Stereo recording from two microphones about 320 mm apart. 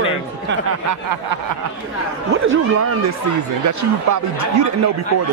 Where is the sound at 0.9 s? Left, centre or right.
Right.